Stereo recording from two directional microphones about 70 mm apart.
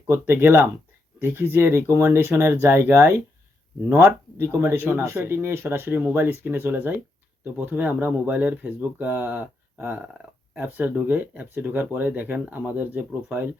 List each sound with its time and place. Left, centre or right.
0.1 s speech: right
4.6 s speech: right